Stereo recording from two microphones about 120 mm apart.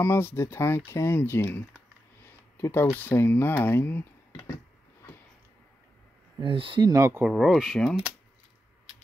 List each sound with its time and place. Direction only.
0.0 s speech: 20° left (ahead or behind)
6.4 s speech: 45° right (ahead or behind)
6.9 s speech: 20° right (ahead or behind)
7.2 s speech: centre (ahead or behind)